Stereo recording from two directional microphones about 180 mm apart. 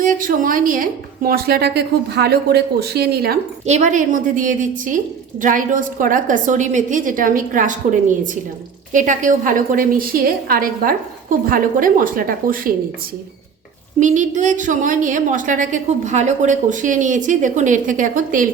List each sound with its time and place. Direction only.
0.0 s a woman's voice: 50° right (ahead or behind)
3.7 s a woman's voice: 40° right (ahead or behind)
14.0 s a woman's voice: 45° right (ahead or behind)